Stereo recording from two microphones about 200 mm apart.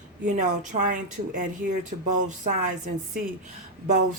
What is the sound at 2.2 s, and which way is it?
Speech, 40° right (ahead or behind).